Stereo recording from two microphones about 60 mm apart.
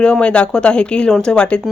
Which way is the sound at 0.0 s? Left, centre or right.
Centre.